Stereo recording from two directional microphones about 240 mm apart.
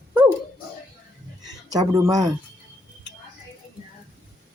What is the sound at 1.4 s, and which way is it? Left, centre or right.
Speech, centre.